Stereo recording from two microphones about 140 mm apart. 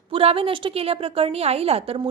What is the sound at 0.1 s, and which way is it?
A woman's voice, 40° right (ahead or behind).